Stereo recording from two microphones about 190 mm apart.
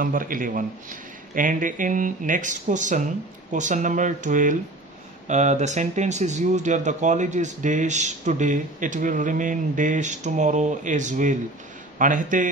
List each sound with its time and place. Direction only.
0.0 s speech: 45° right (ahead or behind)